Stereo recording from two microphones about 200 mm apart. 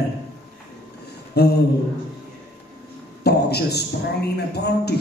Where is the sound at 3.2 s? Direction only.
55° left (ahead or behind).